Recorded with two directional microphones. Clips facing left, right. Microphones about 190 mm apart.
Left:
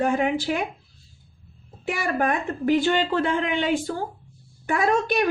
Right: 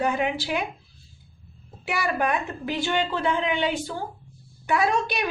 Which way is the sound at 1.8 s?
50° left (ahead or behind).